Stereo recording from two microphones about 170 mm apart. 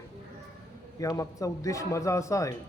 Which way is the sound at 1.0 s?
20° left (ahead or behind).